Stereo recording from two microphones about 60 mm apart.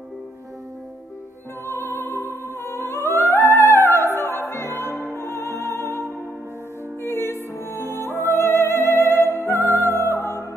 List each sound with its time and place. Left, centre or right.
1.7 s music: left
7.0 s music: left